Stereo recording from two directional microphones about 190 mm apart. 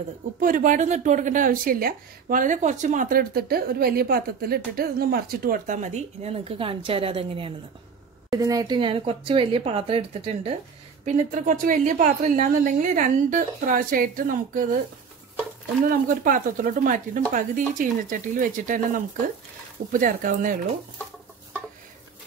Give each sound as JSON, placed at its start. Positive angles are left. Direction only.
{"t": 0.4, "sound": "speech", "side_deg": -45}
{"t": 8.3, "sound": "speech", "side_deg": -20}
{"t": 11.1, "sound": "speech", "side_deg": -40}
{"t": 15.9, "sound": "speech", "side_deg": -45}